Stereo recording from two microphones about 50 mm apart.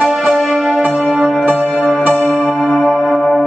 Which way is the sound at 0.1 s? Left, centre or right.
Centre.